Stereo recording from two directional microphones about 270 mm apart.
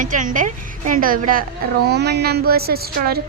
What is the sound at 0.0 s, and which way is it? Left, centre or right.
A woman's voice, right.